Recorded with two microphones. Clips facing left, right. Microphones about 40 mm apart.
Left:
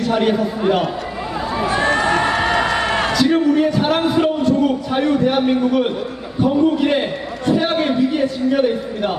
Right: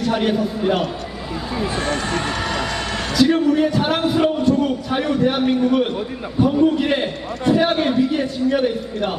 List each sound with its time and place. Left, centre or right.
0.0 s a man's voice: centre
2.4 s music: left
3.1 s a man's voice: centre